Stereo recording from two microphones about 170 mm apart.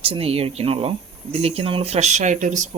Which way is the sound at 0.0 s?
35° right (ahead or behind).